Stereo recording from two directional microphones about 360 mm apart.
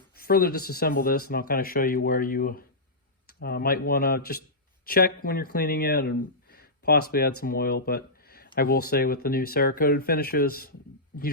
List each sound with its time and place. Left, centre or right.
0.2 s speech: left